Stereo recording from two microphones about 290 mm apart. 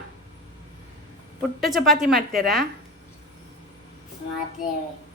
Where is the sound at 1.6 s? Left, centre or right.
Centre.